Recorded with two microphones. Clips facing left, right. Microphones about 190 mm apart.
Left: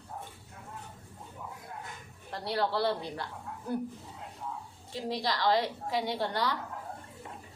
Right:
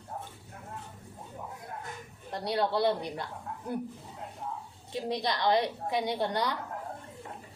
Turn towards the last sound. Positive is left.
turn(degrees=-20)  # may be behind; listen again after turning